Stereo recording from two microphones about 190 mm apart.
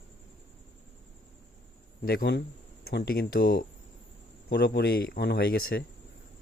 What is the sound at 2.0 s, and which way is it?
Speech, 55° left (ahead or behind).